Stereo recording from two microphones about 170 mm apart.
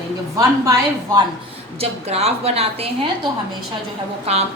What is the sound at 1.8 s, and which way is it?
A woman's voice, 35° right (ahead or behind).